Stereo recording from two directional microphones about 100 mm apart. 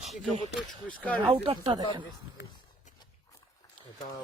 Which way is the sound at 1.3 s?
65° right (ahead or behind).